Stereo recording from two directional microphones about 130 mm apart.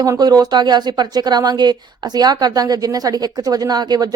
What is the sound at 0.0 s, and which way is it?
A woman's voice, 30° right (ahead or behind).